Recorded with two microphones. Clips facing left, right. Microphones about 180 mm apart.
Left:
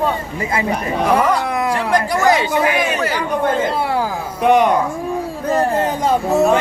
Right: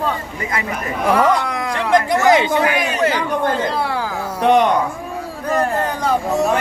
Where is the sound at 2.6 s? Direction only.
25° left (ahead or behind).